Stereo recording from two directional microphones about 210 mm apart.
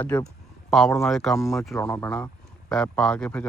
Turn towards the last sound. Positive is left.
turn(degrees=5)  # may be behind; listen again after turning